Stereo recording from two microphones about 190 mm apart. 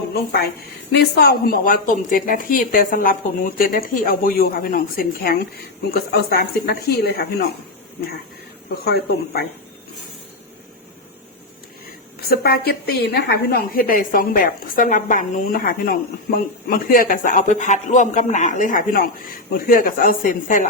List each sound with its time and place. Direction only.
0.1 s a woman's voice: 55° left (ahead or behind)
8.8 s speech: 55° left (ahead or behind)
12.3 s a woman's voice: 55° left (ahead or behind)